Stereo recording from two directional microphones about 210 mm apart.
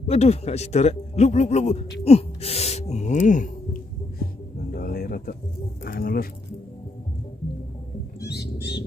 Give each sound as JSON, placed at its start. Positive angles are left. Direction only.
{"t": 0.0, "sound": "a man's voice", "side_deg": 30}
{"t": 2.0, "sound": "gasp", "side_deg": 30}
{"t": 5.9, "sound": "speech", "side_deg": 45}
{"t": 8.2, "sound": "bird", "side_deg": 50}